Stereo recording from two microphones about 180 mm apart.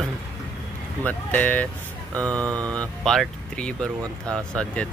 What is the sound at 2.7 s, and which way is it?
Speech, 5° left (ahead or behind).